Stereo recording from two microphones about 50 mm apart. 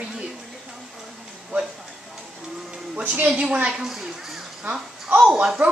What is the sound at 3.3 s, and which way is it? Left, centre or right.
Speech, centre.